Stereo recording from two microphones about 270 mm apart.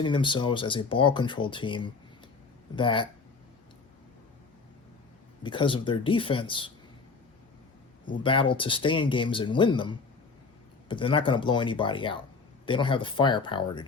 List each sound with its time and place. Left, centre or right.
0.0 s speech: centre
5.4 s speech: centre
8.1 s speech: centre